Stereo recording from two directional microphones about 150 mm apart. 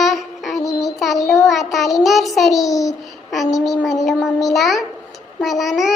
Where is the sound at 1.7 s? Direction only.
Centre (ahead or behind).